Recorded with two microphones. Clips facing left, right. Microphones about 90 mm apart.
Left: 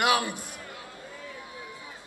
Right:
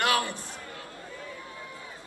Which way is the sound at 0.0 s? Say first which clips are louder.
Left 2 dB; 15° left (ahead or behind).